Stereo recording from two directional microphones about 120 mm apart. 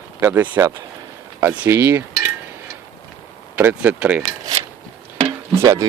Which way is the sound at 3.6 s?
15° right (ahead or behind).